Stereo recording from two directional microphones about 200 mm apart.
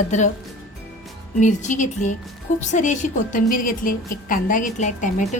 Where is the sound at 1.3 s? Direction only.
40° left (ahead or behind).